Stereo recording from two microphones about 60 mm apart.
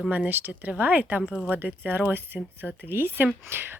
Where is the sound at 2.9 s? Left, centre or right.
Right.